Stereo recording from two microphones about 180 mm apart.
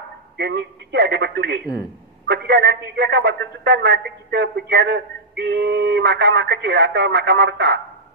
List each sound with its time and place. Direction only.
0.4 s a man's voice: 70° right (ahead or behind)